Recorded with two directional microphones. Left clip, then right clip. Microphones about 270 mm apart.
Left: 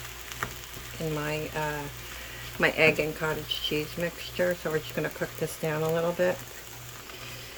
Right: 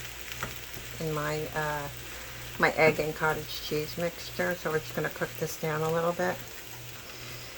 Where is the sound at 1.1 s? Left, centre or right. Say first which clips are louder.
Right 1 dB; centre.